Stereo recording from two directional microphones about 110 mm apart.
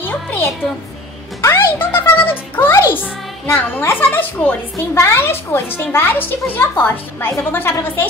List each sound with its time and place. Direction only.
0.0 s a child's voice: 20° left (ahead or behind)